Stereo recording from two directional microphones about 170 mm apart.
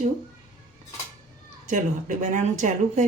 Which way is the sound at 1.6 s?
50° right (ahead or behind).